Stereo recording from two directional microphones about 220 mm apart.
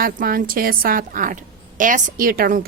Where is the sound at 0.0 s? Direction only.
40° right (ahead or behind).